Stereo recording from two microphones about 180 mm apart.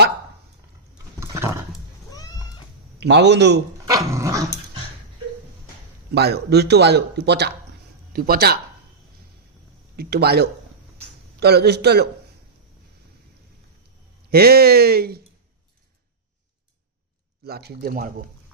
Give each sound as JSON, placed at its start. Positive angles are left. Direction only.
{"t": 1.2, "sound": "roaring cats", "side_deg": -15}
{"t": 3.0, "sound": "speech", "side_deg": -70}
{"t": 3.8, "sound": "dog", "side_deg": -20}
{"t": 6.1, "sound": "speech", "side_deg": -65}
{"t": 9.9, "sound": "speech", "side_deg": -60}
{"t": 14.3, "sound": "speech", "side_deg": -60}
{"t": 17.4, "sound": "speech", "side_deg": -60}